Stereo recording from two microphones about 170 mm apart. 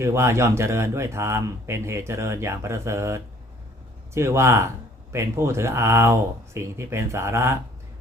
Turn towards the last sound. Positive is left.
turn(degrees=-15)  # may be behind; listen again after turning